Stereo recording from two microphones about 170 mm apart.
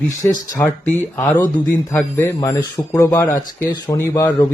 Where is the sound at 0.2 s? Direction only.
15° left (ahead or behind).